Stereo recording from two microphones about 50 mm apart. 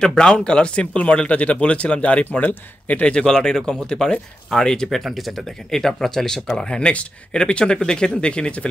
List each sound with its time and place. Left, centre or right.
0.0 s speech: centre
3.1 s speech: centre
4.9 s speech: centre; by 8.6 s left